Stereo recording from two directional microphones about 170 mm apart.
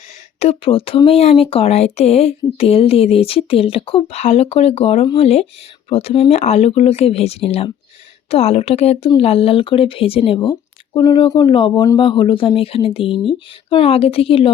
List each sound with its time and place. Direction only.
0.3 s speech: 35° left (ahead or behind); by 11.9 s 20° left (ahead or behind)
11.9 s speech: 30° left (ahead or behind)